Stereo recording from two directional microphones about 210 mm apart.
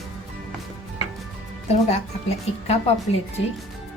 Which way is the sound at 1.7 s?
30° left (ahead or behind).